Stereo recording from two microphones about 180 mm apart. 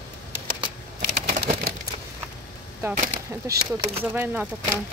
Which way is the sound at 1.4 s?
60° right (ahead or behind).